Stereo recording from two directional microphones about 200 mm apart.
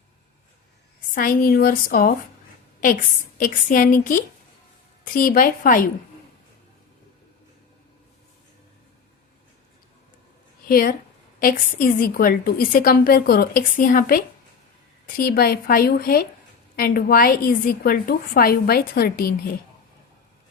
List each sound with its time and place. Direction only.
1.1 s a woman's voice: 45° left (ahead or behind)
10.7 s a woman's voice: 45° left (ahead or behind)